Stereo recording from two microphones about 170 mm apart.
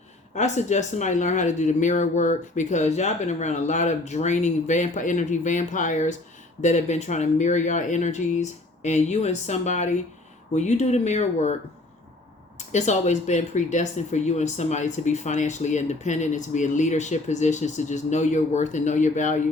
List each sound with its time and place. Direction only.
0.3 s speech: 45° left (ahead or behind)
12.5 s speech: 45° left (ahead or behind)